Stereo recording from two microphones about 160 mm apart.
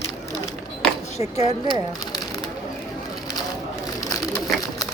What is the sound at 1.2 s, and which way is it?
Speech, 45° left (ahead or behind).